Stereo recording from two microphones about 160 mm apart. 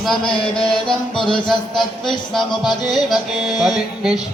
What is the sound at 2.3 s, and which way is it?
A man's voice, centre (ahead or behind).